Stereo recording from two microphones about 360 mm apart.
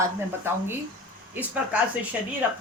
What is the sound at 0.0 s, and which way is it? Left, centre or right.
Speech, centre.